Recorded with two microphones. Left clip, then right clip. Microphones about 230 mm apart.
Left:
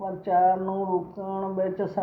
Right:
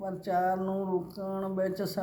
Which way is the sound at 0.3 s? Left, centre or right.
Right.